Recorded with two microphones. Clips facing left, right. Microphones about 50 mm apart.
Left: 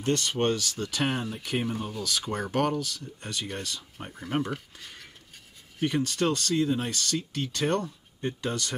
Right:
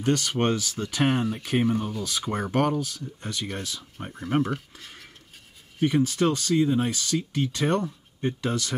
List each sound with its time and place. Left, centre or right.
0.4 s speech: right
1.8 s speech: centre
2.0 s speech: centre
5.9 s speech: centre